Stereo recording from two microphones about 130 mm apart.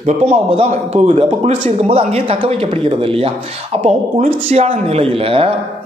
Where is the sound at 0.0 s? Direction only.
55° right (ahead or behind).